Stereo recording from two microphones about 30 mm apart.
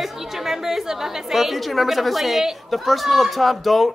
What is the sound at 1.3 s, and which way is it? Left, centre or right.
Speech, centre.